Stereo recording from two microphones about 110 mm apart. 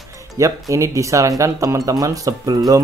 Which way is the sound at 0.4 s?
30° right (ahead or behind).